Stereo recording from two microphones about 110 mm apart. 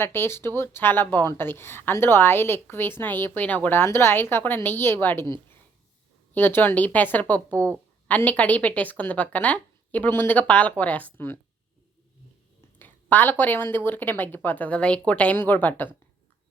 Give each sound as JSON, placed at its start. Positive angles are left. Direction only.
{"t": 0.0, "sound": "a woman's voice", "side_deg": 20}
{"t": 6.3, "sound": "a woman's voice", "side_deg": 15}
{"t": 12.8, "sound": "a sound", "side_deg": 15}
{"t": 13.4, "sound": "a woman's voice", "side_deg": 20}